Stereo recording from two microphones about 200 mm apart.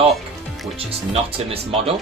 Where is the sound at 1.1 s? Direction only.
30° right (ahead or behind).